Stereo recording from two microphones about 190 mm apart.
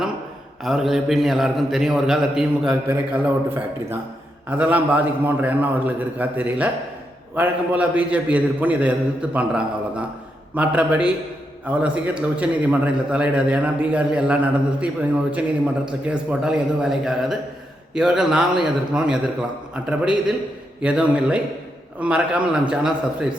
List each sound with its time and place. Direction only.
0.6 s a man's voice: centre (ahead or behind)